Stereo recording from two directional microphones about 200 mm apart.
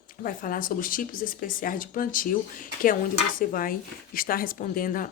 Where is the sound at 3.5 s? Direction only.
45° left (ahead or behind).